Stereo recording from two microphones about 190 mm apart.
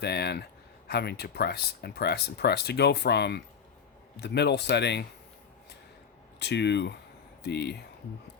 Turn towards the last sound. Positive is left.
turn(degrees=65)  # may be behind; listen again after turning